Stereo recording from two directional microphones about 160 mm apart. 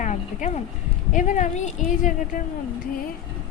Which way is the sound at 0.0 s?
50° left (ahead or behind).